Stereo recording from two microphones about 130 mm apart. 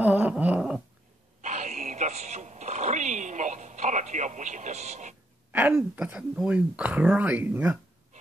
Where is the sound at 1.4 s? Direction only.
65° right (ahead or behind).